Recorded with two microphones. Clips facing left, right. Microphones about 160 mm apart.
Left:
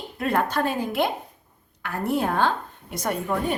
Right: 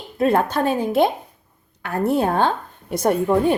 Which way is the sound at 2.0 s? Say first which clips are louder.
Right 4 dB; 30° right (ahead or behind).